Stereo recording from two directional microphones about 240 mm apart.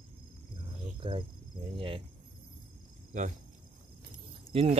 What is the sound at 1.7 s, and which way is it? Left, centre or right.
Cricket, right.